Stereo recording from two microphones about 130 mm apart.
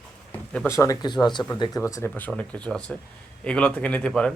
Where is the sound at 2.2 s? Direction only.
10° left (ahead or behind).